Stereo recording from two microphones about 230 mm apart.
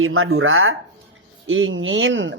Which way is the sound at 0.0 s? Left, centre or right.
Right.